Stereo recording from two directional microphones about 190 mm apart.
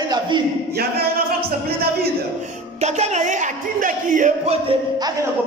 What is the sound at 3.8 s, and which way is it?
Music, 45° right (ahead or behind).